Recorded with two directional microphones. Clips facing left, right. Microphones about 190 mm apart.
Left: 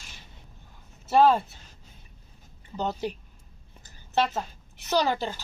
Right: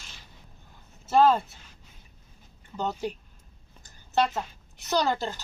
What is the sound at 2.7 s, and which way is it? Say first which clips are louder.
Speech: left 1 dB; 10° left (ahead or behind).